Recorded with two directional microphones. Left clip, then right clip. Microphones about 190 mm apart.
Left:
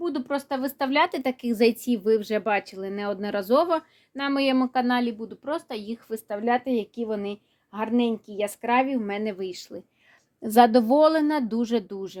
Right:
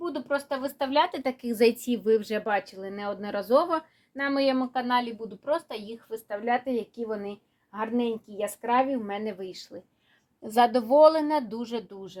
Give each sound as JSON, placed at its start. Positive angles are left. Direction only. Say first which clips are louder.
{"t": 0.0, "sound": "speech", "louder": "left 1 dB", "side_deg": 55}